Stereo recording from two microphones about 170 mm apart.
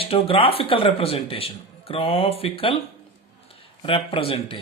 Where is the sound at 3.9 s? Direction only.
30° left (ahead or behind).